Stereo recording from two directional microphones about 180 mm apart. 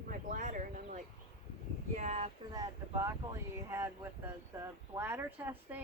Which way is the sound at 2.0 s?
35° right (ahead or behind).